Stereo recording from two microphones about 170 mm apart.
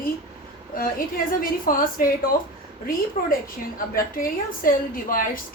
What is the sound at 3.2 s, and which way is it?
A woman's voice, 50° left (ahead or behind).